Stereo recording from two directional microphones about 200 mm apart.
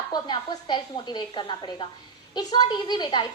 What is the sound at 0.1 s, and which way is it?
A woman's voice, 20° left (ahead or behind).